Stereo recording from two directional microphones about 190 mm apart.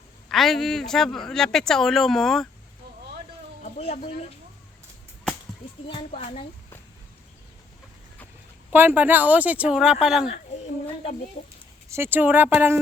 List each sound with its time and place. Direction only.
0.3 s a man's voice: centre (ahead or behind)
3.6 s speech: 35° left (ahead or behind)
5.9 s speech: 30° left (ahead or behind)
8.7 s speech: 10° right (ahead or behind)
11.9 s speech: 10° right (ahead or behind)